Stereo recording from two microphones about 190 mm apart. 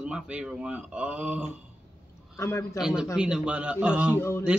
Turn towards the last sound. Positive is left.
turn(degrees=15)  # may be behind; listen again after turning